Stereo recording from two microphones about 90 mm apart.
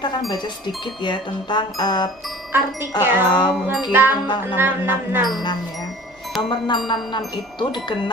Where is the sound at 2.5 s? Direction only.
25° right (ahead or behind).